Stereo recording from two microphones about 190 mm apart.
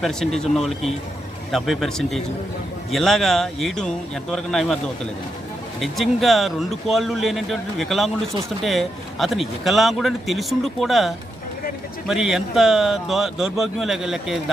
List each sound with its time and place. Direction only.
0.0 s a man's voice: centre (ahead or behind)
5.8 s a man's voice: centre (ahead or behind)